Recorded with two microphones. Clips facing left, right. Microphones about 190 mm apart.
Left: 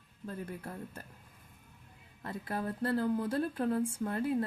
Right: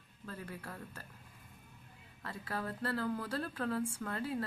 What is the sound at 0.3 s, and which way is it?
Speech, 25° left (ahead or behind).